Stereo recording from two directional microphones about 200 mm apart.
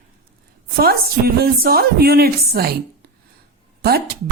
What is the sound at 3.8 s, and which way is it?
Speech, 50° right (ahead or behind).